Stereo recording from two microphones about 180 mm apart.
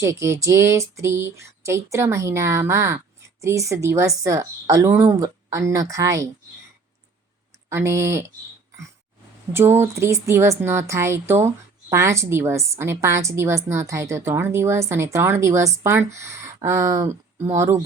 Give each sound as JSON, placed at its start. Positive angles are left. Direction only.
{"t": 0.0, "sound": "speech", "side_deg": -15}
{"t": 7.7, "sound": "speech", "side_deg": -15}
{"t": 9.5, "sound": "speech", "side_deg": -15}